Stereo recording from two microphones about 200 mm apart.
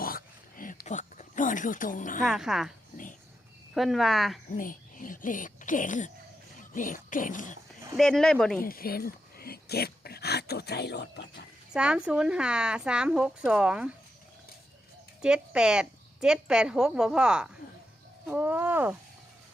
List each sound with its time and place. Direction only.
0.0 s a sound: 45° left (ahead or behind)
2.2 s a woman's voice: centre (ahead or behind)
3.8 s a woman's voice: centre (ahead or behind)
4.5 s speech: 45° left (ahead or behind)
7.9 s a woman's voice: 5° left (ahead or behind)
8.6 s a sound: 45° left (ahead or behind)
11.7 s a woman's voice: 5° right (ahead or behind)
15.2 s a woman's voice: 5° right (ahead or behind)